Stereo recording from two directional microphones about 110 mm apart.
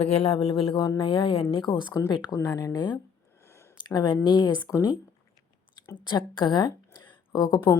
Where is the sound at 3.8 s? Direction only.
40° left (ahead or behind).